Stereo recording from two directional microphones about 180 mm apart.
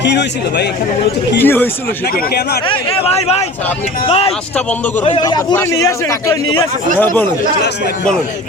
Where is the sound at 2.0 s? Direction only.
60° left (ahead or behind).